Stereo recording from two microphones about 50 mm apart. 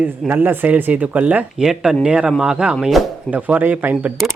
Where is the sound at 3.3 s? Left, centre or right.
Right.